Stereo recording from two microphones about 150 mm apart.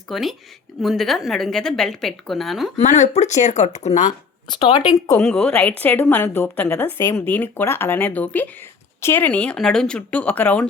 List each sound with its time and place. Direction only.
0.1 s a woman's voice: centre (ahead or behind)
2.7 s speech: 50° left (ahead or behind)
5.2 s speech: 5° left (ahead or behind)